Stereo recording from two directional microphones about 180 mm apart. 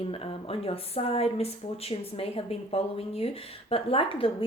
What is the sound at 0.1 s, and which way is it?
Speech, 30° left (ahead or behind).